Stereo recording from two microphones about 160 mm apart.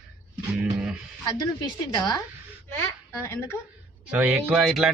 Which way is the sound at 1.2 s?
30° left (ahead or behind).